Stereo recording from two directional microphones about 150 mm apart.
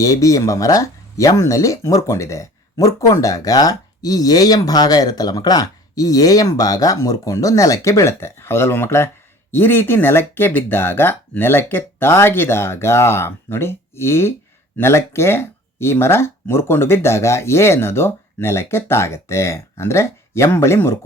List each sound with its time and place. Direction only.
0.0 s speech: 20° left (ahead or behind)